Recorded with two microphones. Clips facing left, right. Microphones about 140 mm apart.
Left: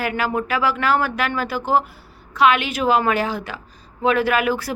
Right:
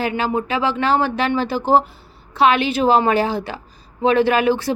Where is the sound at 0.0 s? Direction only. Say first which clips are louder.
Right 2 dB; 25° right (ahead or behind).